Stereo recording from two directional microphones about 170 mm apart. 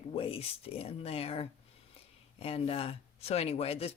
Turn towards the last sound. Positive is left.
turn(degrees=35)  # may be behind; listen again after turning